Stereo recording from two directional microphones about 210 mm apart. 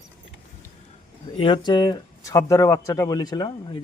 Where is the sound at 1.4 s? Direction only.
20° left (ahead or behind).